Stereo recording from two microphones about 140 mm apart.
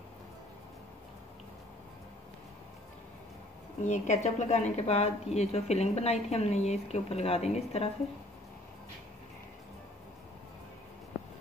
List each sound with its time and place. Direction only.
3.8 s a woman's voice: 60° left (ahead or behind)